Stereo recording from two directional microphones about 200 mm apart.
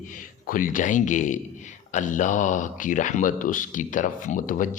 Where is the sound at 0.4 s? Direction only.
45° left (ahead or behind).